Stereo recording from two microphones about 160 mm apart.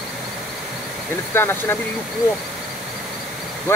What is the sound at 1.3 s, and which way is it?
Speech, 15° left (ahead or behind).